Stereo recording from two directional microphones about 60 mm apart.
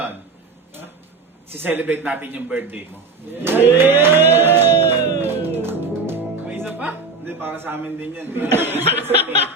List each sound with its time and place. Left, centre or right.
1.5 s a man's voice: right
3.4 s a sound: right
7.3 s a man's voice: right